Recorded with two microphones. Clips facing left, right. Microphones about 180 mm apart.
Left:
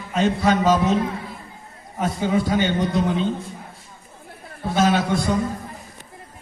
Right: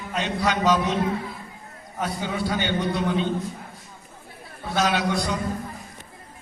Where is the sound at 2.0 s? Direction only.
45° left (ahead or behind).